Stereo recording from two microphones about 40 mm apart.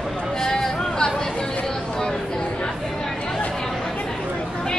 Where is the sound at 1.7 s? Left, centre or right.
Centre.